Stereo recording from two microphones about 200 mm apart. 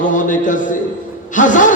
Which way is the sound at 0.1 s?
40° left (ahead or behind).